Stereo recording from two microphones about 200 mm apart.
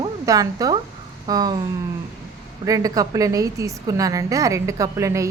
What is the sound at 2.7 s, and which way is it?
A woman's voice, 15° right (ahead or behind).